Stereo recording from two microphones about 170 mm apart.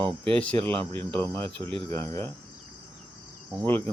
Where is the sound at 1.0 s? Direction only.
10° left (ahead or behind).